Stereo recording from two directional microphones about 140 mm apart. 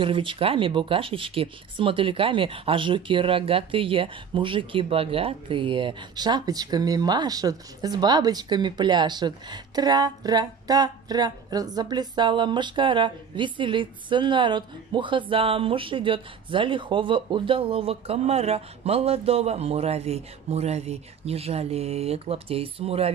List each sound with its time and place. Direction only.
0.0 s speech: 35° right (ahead or behind)